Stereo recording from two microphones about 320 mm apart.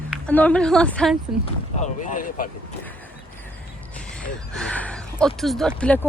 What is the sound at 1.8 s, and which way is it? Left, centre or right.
Speech, left.